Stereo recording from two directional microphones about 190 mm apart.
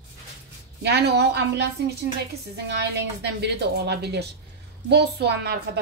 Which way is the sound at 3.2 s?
60° right (ahead or behind).